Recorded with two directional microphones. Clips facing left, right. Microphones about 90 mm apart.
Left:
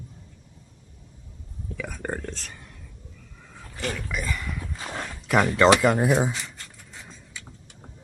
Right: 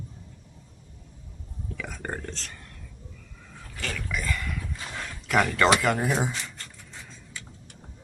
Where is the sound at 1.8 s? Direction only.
5° left (ahead or behind).